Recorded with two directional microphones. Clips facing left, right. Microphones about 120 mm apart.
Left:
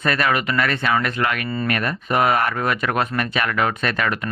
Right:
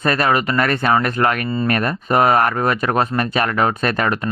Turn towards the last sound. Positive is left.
turn(degrees=-40)  # may be behind; listen again after turning